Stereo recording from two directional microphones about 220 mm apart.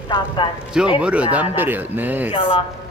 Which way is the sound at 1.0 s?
5° right (ahead or behind).